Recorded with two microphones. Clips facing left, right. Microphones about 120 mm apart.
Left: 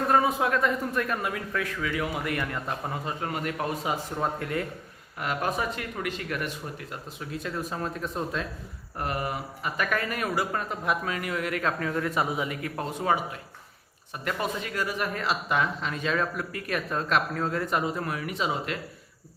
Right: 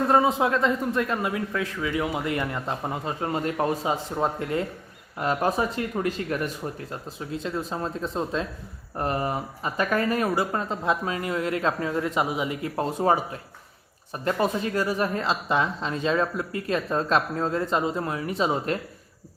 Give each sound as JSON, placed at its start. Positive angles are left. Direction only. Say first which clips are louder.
{"t": 0.1, "sound": "a woman's voice", "louder": "right 2 dB", "side_deg": -25}